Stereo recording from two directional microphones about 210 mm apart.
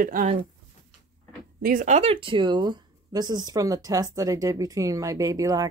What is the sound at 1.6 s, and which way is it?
Speech, 40° right (ahead or behind).